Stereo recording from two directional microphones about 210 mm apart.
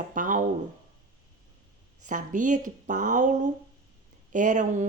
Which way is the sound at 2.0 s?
35° right (ahead or behind).